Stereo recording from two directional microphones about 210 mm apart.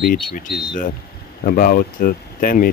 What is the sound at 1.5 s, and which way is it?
Speech, 45° left (ahead or behind).